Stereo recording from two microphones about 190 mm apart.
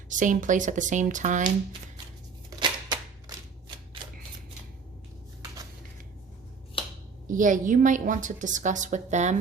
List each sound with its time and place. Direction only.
0.1 s speech: 40° right (ahead or behind)
2.5 s a sound: 20° right (ahead or behind)
7.3 s a woman's voice: 45° right (ahead or behind)